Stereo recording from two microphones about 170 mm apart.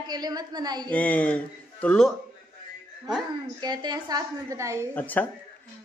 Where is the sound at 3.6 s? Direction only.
25° right (ahead or behind).